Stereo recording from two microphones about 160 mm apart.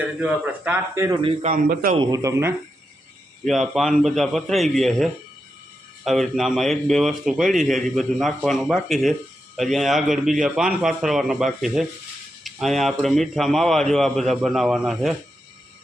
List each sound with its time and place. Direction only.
0.0 s a man's voice: 10° right (ahead or behind)
1.4 s a man's voice: 60° right (ahead or behind)
2.0 s speech: 20° right (ahead or behind)
3.4 s speech: centre (ahead or behind)